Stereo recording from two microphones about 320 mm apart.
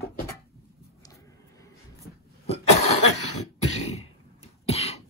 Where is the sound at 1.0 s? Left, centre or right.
Centre.